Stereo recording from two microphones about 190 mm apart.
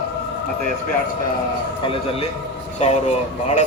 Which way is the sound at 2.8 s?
35° left (ahead or behind).